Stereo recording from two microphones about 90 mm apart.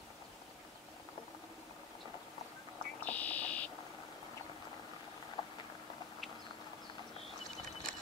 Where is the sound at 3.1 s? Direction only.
15° left (ahead or behind).